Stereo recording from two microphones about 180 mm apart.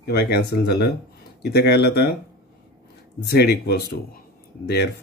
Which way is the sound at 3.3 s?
65° left (ahead or behind).